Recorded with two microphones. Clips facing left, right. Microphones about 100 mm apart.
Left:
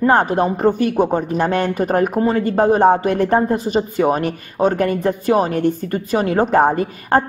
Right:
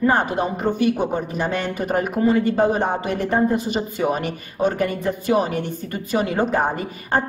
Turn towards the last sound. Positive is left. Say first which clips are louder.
# left 6 dB
turn(degrees=50)  # may be behind; listen again after turning